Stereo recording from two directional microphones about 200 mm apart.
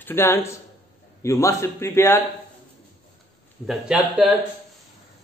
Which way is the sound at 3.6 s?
5° right (ahead or behind).